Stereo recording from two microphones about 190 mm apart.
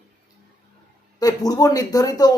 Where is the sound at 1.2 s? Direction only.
20° left (ahead or behind).